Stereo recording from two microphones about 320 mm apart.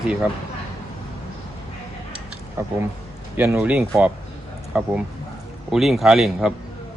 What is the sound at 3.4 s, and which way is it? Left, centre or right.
Speech, centre.